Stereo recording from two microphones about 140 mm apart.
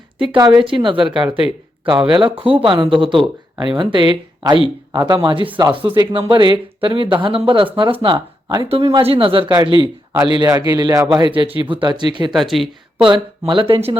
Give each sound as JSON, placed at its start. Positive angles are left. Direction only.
{"t": 0.3, "sound": "speech", "side_deg": -30}
{"t": 10.3, "sound": "speech", "side_deg": -25}
{"t": 12.3, "sound": "speech", "side_deg": 0}
{"t": 13.0, "sound": "speech", "side_deg": -40}